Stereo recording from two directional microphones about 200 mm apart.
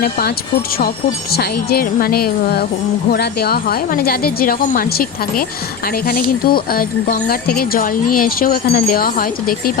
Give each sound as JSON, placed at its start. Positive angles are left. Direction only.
{"t": 0.0, "sound": "speech", "side_deg": 50}